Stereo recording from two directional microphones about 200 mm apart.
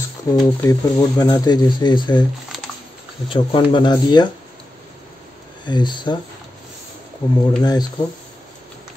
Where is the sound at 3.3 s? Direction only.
25° left (ahead or behind).